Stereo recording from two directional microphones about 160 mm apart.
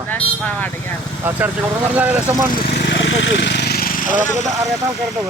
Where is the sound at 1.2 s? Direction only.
10° right (ahead or behind).